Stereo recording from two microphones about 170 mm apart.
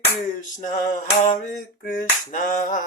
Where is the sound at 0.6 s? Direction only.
45° left (ahead or behind).